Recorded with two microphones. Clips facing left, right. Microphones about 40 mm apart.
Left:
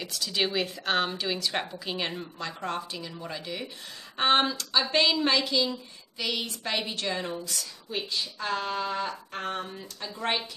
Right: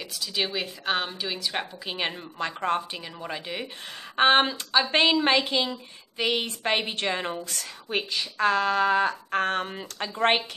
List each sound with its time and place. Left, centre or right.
0.0 s a woman's voice: centre
1.9 s a woman's voice: right
7.9 s speech: right